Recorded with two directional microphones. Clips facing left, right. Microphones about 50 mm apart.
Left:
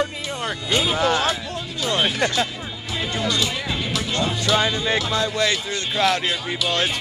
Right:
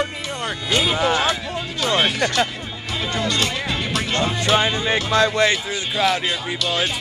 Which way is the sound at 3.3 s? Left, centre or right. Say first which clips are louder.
Right 1 dB; right.